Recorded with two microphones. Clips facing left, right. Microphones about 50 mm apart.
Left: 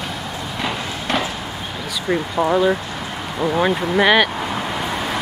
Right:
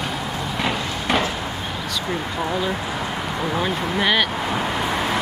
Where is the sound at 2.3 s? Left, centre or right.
Centre.